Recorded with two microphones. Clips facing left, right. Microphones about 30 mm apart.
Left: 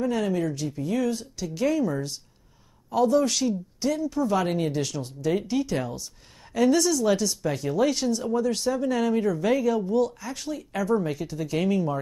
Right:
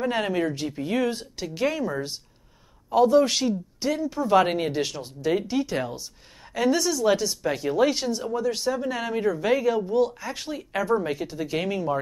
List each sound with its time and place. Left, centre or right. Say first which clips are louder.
0.0 s speech: right 1 dB; right; by 12.0 s centre